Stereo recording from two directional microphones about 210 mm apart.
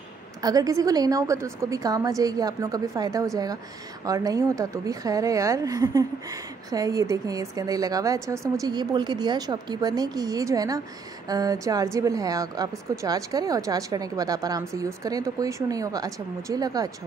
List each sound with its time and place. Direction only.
0.4 s a woman's voice: 20° right (ahead or behind)